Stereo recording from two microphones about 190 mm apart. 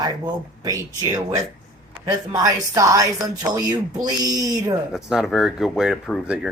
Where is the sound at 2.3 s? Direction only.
15° right (ahead or behind).